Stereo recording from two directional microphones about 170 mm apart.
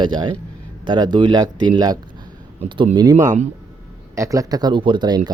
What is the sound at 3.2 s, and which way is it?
Speech, 45° right (ahead or behind).